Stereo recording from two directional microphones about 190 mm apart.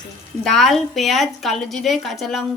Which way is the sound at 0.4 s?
Centre (ahead or behind).